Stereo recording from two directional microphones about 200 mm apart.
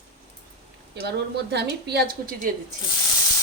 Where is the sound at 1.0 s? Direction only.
55° right (ahead or behind).